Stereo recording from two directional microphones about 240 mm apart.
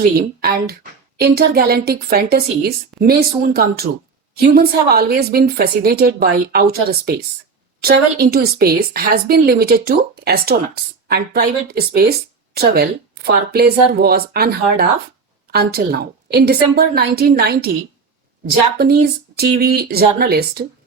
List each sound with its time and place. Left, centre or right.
0.2 s speech: right